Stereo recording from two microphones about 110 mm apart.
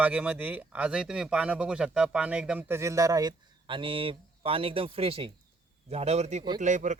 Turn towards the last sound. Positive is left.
turn(degrees=-90)